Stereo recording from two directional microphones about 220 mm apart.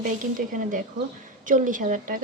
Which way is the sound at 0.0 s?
35° right (ahead or behind).